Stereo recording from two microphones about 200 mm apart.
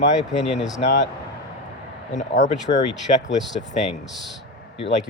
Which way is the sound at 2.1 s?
40° left (ahead or behind).